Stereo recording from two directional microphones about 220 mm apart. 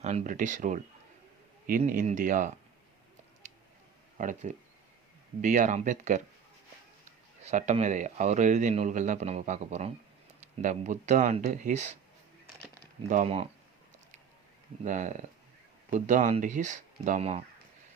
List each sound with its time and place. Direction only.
0.0 s speech: 35° right (ahead or behind)
3.4 s a sound: 30° right (ahead or behind)
4.2 s speech: 35° right (ahead or behind)
7.4 s speech: 30° right (ahead or behind)
13.1 s speech: 30° right (ahead or behind)
14.8 s speech: 35° right (ahead or behind)